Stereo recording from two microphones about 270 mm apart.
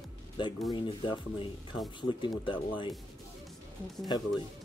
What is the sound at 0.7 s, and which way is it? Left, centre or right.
Speech, centre.